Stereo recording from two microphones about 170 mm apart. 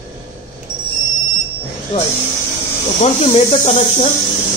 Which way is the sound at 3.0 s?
40° left (ahead or behind).